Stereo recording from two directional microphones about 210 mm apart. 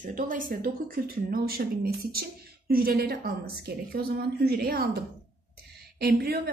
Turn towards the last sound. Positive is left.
turn(degrees=-45)  # may be behind; listen again after turning